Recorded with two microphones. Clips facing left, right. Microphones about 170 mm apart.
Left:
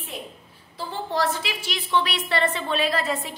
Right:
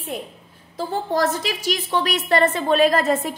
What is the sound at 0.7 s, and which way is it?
A woman's voice, 45° right (ahead or behind).